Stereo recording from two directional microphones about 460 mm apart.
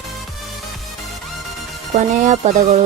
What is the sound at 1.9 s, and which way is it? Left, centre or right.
Speech, centre.